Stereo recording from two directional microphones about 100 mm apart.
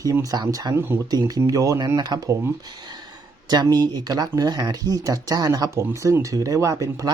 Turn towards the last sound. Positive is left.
turn(degrees=-35)  # may be behind; listen again after turning